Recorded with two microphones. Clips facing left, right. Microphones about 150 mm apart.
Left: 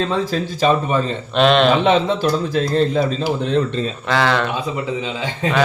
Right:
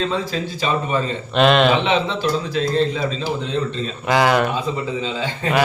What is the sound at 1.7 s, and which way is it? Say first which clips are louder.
Speech: left 4 dB; 50° left (ahead or behind).